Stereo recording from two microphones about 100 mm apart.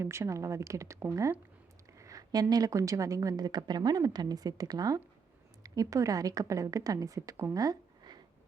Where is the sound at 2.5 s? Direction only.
35° right (ahead or behind).